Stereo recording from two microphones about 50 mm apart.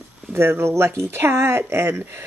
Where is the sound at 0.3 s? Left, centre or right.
Right.